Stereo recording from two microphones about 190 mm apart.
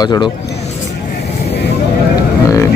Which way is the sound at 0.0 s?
20° left (ahead or behind).